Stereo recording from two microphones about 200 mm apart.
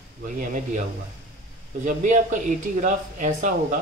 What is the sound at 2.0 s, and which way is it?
Speech, 40° right (ahead or behind).